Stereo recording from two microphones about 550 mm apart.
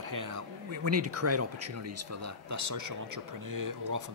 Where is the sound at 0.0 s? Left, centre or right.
Right.